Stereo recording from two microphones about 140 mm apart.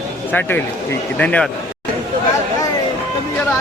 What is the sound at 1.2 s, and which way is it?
Speech, 10° left (ahead or behind).